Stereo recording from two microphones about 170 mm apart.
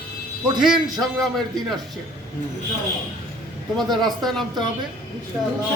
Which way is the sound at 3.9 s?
Centre (ahead or behind).